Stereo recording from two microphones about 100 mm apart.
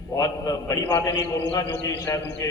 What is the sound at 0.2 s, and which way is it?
A man's voice, 35° left (ahead or behind).